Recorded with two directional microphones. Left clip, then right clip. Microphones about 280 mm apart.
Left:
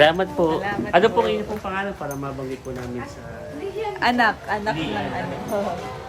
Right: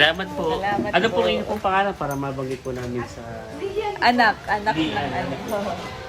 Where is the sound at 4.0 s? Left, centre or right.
Centre.